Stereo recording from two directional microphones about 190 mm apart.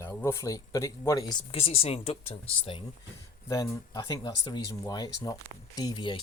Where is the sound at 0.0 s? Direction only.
10° left (ahead or behind).